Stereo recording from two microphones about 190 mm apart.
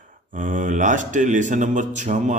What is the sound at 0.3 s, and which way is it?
A man's voice, 45° right (ahead or behind).